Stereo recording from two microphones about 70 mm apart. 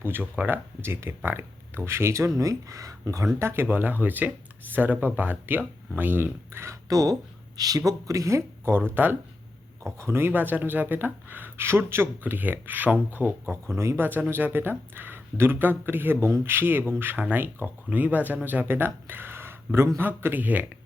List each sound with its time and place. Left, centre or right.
0.0 s speech: right
3.3 s speech: right
6.8 s speech: right
8.8 s speech: right